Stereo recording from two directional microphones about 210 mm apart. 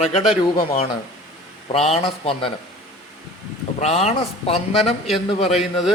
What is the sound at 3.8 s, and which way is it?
A man's voice, 30° left (ahead or behind).